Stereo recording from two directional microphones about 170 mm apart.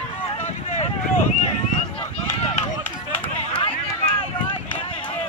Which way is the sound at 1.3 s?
40° left (ahead or behind).